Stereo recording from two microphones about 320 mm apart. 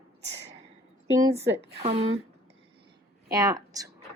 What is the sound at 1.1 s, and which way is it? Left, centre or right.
A woman's voice, centre.